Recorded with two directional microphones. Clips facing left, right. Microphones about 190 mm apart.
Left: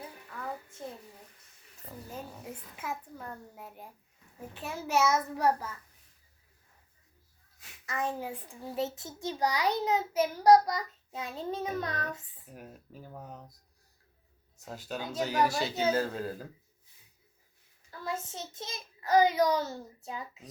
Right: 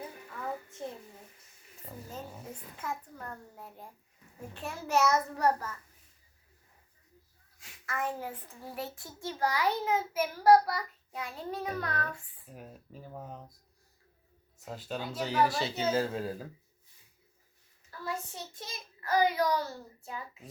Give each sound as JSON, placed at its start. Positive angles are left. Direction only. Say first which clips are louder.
{"t": 2.7, "sound": "a child's voice", "louder": "even", "side_deg": 5}
{"t": 7.9, "sound": "a child's voice", "louder": "left 1 dB", "side_deg": 15}
{"t": 12.5, "sound": "speech", "louder": "even", "side_deg": 0}
{"t": 14.6, "sound": "speech", "louder": "right 1 dB", "side_deg": 0}
{"t": 18.0, "sound": "a child's voice", "louder": "left 1 dB", "side_deg": 20}